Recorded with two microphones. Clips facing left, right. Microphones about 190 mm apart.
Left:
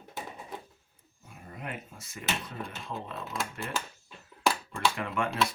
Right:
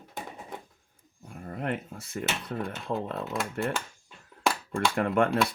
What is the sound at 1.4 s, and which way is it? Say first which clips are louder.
Speech: right 8 dB; 60° right (ahead or behind).